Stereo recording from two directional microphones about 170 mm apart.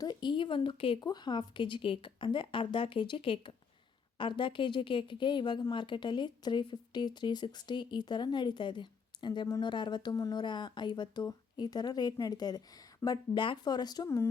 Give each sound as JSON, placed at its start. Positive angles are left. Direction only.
{"t": 0.0, "sound": "speech", "side_deg": 25}